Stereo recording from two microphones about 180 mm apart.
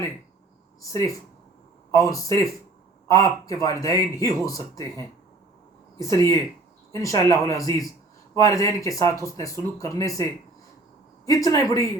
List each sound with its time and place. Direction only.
0.8 s a man's voice: 15° left (ahead or behind)
11.3 s a man's voice: 20° left (ahead or behind)